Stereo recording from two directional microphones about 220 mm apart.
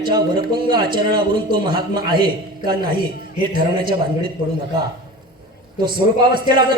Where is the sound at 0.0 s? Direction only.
20° right (ahead or behind).